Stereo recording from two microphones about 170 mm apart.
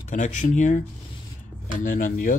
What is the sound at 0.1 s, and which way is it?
Speech, 45° left (ahead or behind).